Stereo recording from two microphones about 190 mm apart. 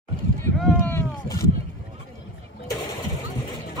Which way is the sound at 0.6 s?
10° left (ahead or behind).